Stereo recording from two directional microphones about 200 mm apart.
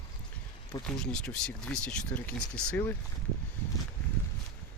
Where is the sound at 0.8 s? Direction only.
5° left (ahead or behind).